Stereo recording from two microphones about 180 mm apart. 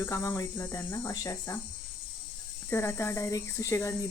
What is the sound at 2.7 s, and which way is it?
Speech, 15° left (ahead or behind).